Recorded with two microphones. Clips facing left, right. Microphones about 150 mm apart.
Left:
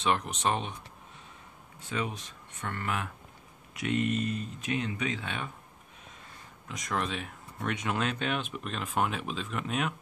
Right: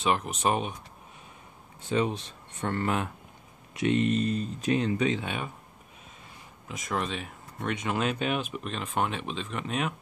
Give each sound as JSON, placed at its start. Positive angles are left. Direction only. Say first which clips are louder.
{"t": 0.0, "sound": "speech", "louder": "right 2 dB", "side_deg": -5}
{"t": 1.9, "sound": "speech", "louder": "right 7 dB", "side_deg": -30}
{"t": 5.2, "sound": "speech", "louder": "right 3 dB", "side_deg": -10}
{"t": 6.7, "sound": "speech", "louder": "right 1 dB", "side_deg": -5}